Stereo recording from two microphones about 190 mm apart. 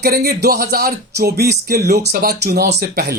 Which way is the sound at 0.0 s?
55° right (ahead or behind).